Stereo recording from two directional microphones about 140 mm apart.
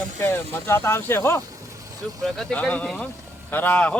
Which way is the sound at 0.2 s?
15° left (ahead or behind).